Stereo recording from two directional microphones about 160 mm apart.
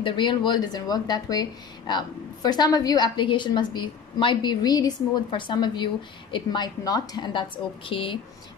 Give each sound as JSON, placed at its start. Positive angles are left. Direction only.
{"t": 0.0, "sound": "a woman's voice", "side_deg": 30}